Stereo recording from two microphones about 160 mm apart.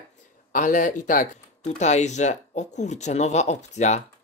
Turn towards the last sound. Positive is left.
turn(degrees=45)  # may be behind; listen again after turning